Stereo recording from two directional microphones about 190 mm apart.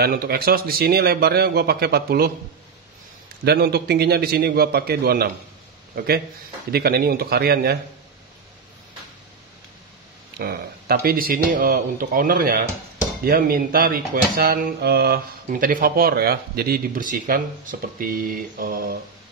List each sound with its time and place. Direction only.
0.0 s speech: 50° right (ahead or behind)
3.4 s a man's voice: 55° right (ahead or behind)
10.4 s speech: 55° right (ahead or behind)